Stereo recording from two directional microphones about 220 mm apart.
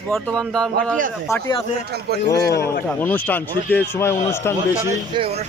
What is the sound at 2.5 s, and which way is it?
Speech, 50° left (ahead or behind).